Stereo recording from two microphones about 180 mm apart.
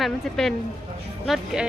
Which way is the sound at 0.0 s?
Centre (ahead or behind).